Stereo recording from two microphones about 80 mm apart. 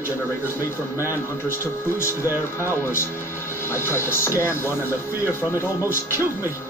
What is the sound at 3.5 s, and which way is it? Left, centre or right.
Speech, left.